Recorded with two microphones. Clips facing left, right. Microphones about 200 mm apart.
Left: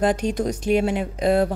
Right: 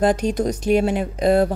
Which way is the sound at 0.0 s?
40° right (ahead or behind).